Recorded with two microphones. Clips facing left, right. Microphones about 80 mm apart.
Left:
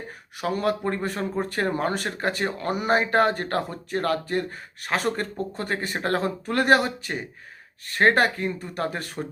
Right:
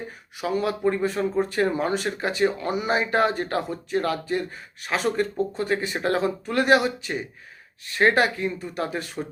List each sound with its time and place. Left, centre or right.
0.4 s speech: left